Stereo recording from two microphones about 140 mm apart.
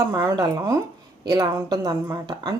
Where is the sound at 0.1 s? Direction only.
20° right (ahead or behind).